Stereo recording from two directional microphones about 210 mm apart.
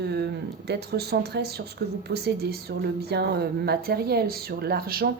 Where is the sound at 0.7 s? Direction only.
50° right (ahead or behind).